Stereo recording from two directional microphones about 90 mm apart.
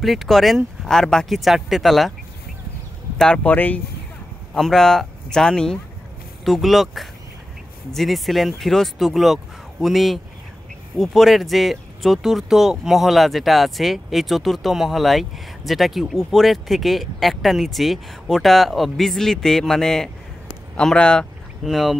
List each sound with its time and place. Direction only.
0.0 s speech: centre (ahead or behind)
3.4 s speech: 20° left (ahead or behind)
4.6 s speech: 5° left (ahead or behind)
21.6 s speech: centre (ahead or behind)